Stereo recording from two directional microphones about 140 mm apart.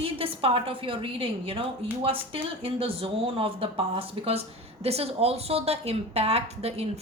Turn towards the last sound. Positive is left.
turn(degrees=-50)  # may be behind; listen again after turning